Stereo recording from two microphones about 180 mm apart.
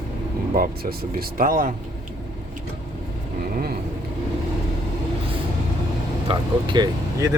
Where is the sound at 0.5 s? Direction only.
55° right (ahead or behind).